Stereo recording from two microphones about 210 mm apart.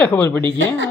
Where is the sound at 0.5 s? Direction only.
60° right (ahead or behind).